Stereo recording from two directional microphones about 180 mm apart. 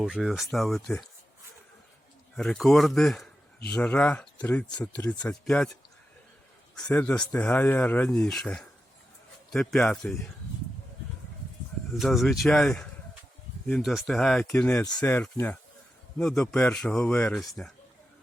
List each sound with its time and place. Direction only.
0.0 s speech: centre (ahead or behind)
2.3 s speech: 5° left (ahead or behind)
6.8 s speech: 10° left (ahead or behind)
11.9 s speech: centre (ahead or behind)